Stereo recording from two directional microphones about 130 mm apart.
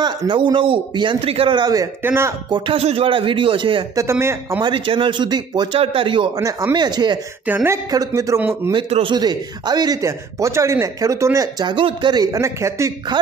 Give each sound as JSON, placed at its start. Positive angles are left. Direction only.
{"t": 0.0, "sound": "speech", "side_deg": -40}
{"t": 2.0, "sound": "speech", "side_deg": -20}
{"t": 2.5, "sound": "speech", "side_deg": -40}
{"t": 3.9, "sound": "speech", "side_deg": -20}
{"t": 4.6, "sound": "speech", "side_deg": -40}
{"t": 6.3, "sound": "speech", "side_deg": -25}
{"t": 7.4, "sound": "speech", "side_deg": -15}
{"t": 7.9, "sound": "speech", "side_deg": -25}
{"t": 9.1, "sound": "speech", "side_deg": -30}